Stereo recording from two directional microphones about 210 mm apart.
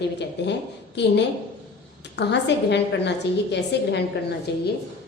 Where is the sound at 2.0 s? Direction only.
55° left (ahead or behind).